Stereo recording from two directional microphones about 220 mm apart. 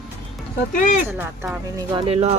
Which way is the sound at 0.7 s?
35° left (ahead or behind).